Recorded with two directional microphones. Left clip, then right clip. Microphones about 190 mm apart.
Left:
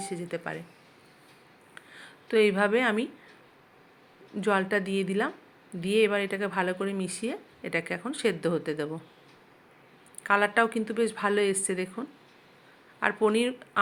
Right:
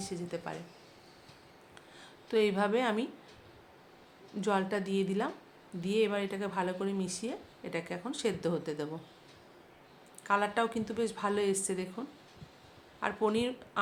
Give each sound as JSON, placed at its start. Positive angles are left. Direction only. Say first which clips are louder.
{"t": 0.0, "sound": "speech", "louder": "left 5 dB", "side_deg": 20}
{"t": 2.2, "sound": "speech", "louder": "left 6 dB", "side_deg": 15}
{"t": 4.4, "sound": "speech", "louder": "left 6 dB", "side_deg": 20}
{"t": 10.2, "sound": "speech", "louder": "left 6 dB", "side_deg": 25}